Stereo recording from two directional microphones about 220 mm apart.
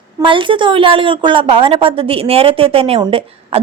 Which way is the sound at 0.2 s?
20° right (ahead or behind).